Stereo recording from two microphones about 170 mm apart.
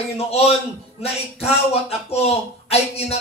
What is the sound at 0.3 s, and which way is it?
A man's voice, 35° left (ahead or behind).